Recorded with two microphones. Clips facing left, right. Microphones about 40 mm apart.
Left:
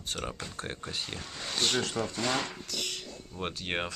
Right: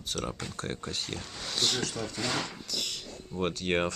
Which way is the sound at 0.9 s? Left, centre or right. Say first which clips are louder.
Right 1 dB; centre.